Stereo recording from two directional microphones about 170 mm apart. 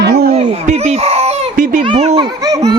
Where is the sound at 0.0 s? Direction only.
70° right (ahead or behind).